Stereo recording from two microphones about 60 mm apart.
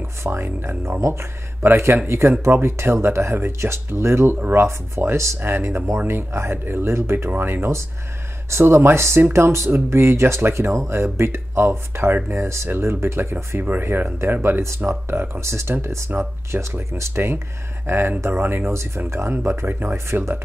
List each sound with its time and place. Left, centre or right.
0.2 s speech: right
5.4 s speech: right
7.2 s speech: right
8.5 s speech: right